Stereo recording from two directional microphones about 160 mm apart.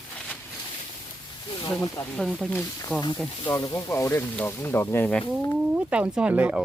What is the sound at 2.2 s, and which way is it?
Speech, 5° left (ahead or behind).